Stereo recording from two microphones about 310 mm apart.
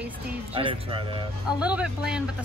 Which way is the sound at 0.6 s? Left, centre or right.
Centre.